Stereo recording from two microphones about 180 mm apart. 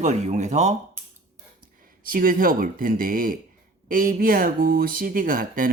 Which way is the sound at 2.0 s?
50° right (ahead or behind).